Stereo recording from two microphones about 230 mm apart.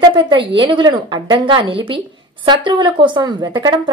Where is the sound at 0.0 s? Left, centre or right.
Centre.